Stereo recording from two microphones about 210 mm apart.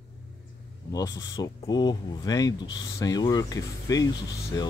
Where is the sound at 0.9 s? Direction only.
15° left (ahead or behind).